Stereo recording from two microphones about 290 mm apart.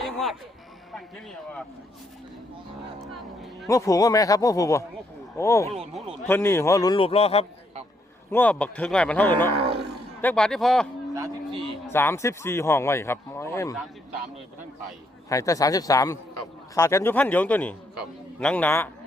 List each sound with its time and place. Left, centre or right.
0.0 s a sound: centre
0.9 s speech: centre
3.7 s speech: centre
8.3 s speech: centre
9.6 s speech: centre
10.2 s speech: centre
11.1 s a sound: centre
11.6 s speech: centre
15.3 s speech: centre